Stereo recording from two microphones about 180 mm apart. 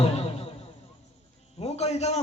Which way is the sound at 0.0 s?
35° left (ahead or behind).